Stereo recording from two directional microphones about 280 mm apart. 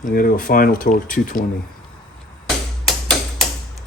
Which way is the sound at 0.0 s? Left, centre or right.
Left.